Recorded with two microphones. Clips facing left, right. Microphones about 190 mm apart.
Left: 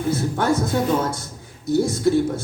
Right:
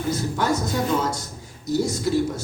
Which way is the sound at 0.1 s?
55° left (ahead or behind).